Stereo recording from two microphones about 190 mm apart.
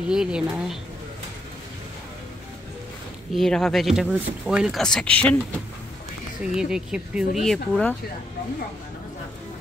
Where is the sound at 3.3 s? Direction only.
Centre (ahead or behind).